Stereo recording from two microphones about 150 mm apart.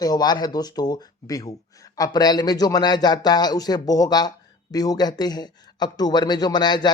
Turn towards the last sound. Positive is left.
turn(degrees=30)  # may be behind; listen again after turning